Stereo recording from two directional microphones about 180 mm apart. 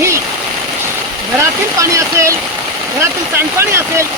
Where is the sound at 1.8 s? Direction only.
15° right (ahead or behind).